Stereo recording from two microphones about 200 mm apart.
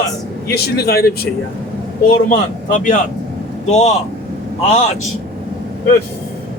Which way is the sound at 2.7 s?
40° left (ahead or behind).